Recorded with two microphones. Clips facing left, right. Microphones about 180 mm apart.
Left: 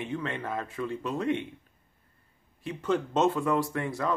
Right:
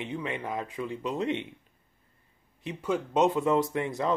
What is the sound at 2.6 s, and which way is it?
Speech, 10° right (ahead or behind).